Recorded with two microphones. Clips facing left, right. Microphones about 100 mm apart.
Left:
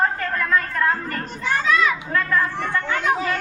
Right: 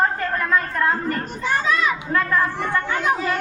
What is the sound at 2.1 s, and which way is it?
Chatter, 20° right (ahead or behind).